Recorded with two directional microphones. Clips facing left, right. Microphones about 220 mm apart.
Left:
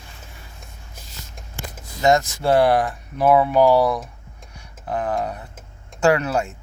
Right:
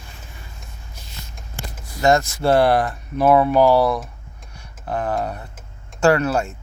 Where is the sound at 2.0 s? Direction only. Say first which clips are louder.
Right 1 dB; 20° left (ahead or behind).